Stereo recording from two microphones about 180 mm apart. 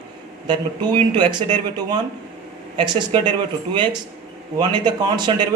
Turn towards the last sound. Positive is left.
turn(degrees=-25)  # may be behind; listen again after turning